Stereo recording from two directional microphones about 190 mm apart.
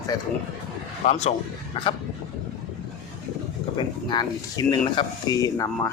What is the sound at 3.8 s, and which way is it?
Speech, 20° left (ahead or behind).